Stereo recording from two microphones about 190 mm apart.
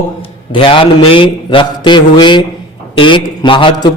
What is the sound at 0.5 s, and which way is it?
A man's voice, 30° left (ahead or behind).